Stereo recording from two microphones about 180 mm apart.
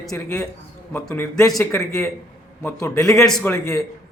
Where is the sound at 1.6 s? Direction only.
15° left (ahead or behind).